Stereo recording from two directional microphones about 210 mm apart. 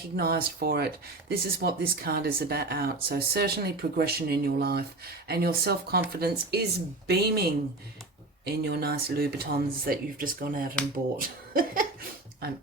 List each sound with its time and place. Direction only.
0.2 s speech: 45° right (ahead or behind)